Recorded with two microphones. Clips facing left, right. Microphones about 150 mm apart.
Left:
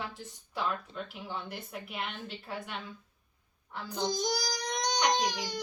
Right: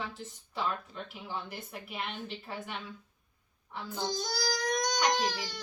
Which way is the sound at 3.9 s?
20° left (ahead or behind).